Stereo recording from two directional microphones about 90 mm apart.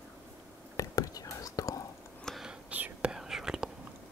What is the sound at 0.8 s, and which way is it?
Whispering, 40° left (ahead or behind).